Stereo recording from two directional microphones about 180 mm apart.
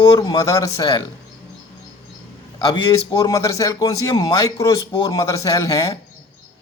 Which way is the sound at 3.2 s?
20° left (ahead or behind).